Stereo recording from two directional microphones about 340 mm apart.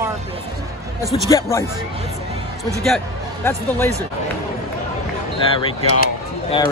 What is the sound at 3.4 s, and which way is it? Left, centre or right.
Speech, centre.